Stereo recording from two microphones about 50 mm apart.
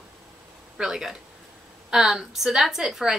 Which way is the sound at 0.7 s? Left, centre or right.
Centre.